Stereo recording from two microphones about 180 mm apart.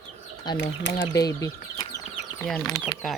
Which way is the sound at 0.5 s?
75° left (ahead or behind).